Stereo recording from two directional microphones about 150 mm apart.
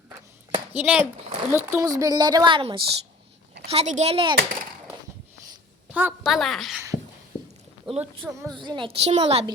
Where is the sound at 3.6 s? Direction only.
45° right (ahead or behind).